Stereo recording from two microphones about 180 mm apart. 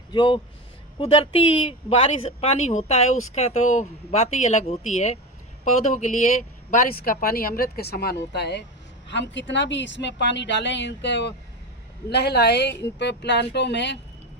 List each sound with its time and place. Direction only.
0.1 s a woman's voice: 25° left (ahead or behind); by 14.0 s 75° left (ahead or behind)